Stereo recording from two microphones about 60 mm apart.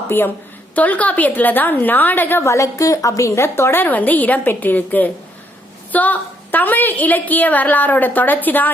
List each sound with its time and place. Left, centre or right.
0.8 s a woman's voice: left
2.4 s a woman's voice: left